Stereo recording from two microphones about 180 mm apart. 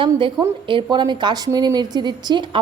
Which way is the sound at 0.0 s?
25° right (ahead or behind).